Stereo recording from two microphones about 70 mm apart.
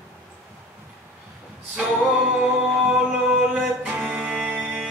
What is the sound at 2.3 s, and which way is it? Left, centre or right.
Music, centre.